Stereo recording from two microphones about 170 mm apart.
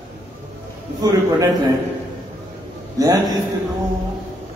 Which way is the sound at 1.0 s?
20° right (ahead or behind).